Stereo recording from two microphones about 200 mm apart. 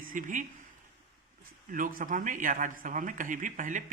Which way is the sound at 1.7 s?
45° right (ahead or behind).